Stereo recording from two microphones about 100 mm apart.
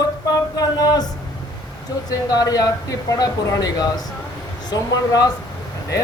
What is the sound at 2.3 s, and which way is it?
A man's voice, 40° left (ahead or behind).